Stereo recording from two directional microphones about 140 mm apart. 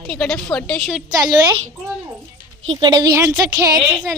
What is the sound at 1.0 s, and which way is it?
Speech, 25° right (ahead or behind).